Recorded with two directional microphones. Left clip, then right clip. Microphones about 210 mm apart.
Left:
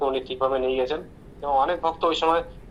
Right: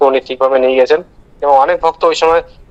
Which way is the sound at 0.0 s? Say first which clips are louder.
Right 13 dB; 50° right (ahead or behind).